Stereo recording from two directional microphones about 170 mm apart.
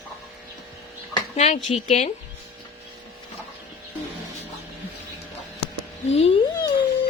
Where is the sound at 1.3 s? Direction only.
40° left (ahead or behind).